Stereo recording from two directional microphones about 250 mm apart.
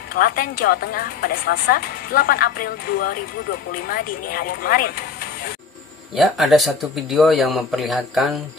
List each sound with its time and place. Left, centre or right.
0.1 s a woman's voice: left
6.1 s speech: centre